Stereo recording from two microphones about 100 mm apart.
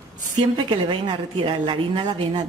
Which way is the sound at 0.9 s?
55° right (ahead or behind).